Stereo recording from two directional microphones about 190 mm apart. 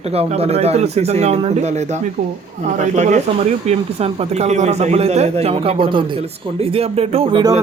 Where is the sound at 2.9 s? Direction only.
40° right (ahead or behind).